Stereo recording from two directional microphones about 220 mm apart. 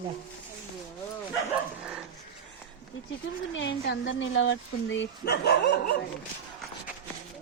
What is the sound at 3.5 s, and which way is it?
Speech, 55° left (ahead or behind).